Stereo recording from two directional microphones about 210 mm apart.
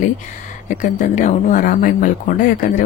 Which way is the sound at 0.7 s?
35° left (ahead or behind).